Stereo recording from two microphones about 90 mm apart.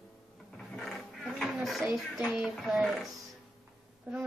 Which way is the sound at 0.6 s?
Centre (ahead or behind).